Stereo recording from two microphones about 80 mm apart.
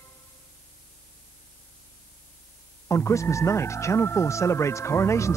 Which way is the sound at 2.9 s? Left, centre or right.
Left.